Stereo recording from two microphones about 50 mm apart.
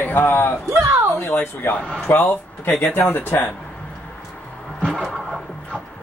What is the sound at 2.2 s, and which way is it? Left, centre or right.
A man's voice, left.